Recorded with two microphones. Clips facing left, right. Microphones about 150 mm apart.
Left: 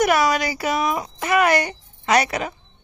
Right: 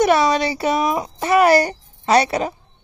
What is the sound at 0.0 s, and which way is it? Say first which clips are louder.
A child's voice: right 3 dB; 30° right (ahead or behind).